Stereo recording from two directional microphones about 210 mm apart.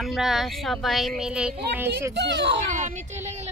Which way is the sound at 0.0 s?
Centre (ahead or behind).